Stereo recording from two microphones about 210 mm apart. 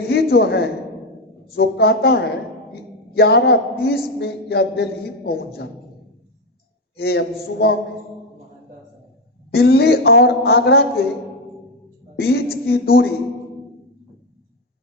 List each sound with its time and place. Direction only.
0.1 s a sound: 50° left (ahead or behind)
1.5 s speech: 50° left (ahead or behind)
6.9 s speech: 50° left (ahead or behind)
9.5 s speech: 50° left (ahead or behind)
12.1 s speech: 50° left (ahead or behind)